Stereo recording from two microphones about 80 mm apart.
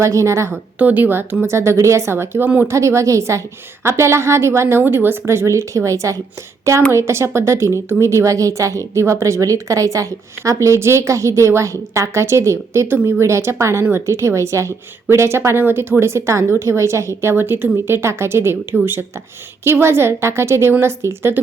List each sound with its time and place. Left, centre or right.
0.0 s a woman's voice: right
0.8 s speech: right
1.5 s a woman's voice: right